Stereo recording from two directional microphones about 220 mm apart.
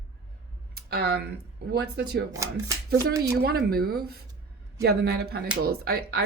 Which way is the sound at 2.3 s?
15° right (ahead or behind).